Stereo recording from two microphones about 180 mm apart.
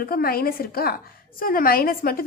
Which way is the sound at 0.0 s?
55° left (ahead or behind).